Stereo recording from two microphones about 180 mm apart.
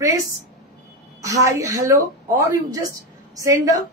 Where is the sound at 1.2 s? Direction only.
15° right (ahead or behind).